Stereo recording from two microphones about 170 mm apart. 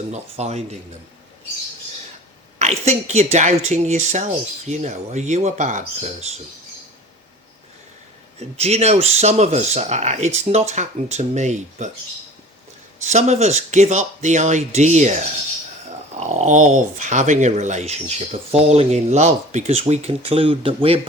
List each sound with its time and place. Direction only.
0.1 s speech: 40° right (ahead or behind)
2.6 s speech: 40° right (ahead or behind)
8.4 s speech: 40° right (ahead or behind)
13.1 s speech: 40° right (ahead or behind)
16.2 s speech: 45° right (ahead or behind)